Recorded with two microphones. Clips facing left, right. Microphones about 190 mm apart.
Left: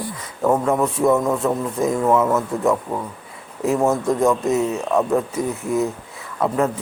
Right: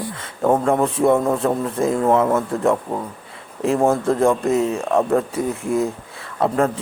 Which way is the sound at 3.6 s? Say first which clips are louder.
Right 1 dB; 30° right (ahead or behind).